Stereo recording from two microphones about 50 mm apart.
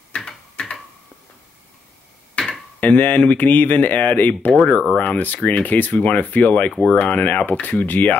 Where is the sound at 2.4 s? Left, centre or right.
Left.